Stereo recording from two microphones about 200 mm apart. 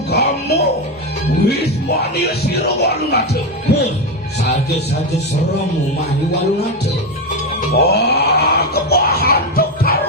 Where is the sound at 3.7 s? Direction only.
55° left (ahead or behind).